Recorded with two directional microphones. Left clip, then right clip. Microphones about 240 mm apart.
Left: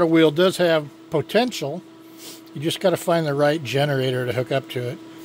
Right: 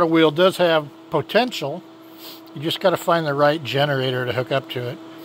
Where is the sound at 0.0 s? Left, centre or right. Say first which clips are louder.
Right 1 dB; left.